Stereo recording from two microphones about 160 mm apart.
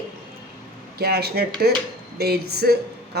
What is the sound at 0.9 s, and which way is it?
Speech, 85° right.